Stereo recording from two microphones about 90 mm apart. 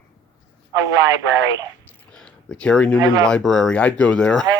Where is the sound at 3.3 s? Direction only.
5° left (ahead or behind).